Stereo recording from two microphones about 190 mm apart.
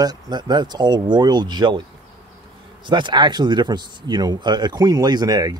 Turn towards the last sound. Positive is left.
turn(degrees=-20)  # may be behind; listen again after turning